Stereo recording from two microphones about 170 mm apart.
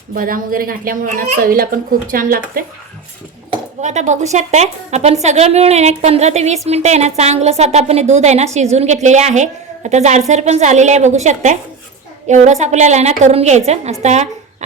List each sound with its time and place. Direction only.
0.1 s a woman's voice: 55° right (ahead or behind)
3.8 s a woman's voice: 45° right (ahead or behind)